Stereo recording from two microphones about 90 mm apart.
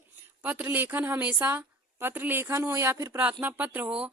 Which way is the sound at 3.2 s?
15° right (ahead or behind).